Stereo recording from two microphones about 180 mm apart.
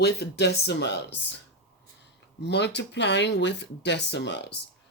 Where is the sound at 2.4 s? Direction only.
70° left (ahead or behind).